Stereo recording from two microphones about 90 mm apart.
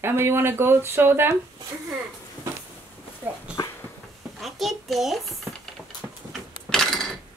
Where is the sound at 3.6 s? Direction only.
50° left (ahead or behind).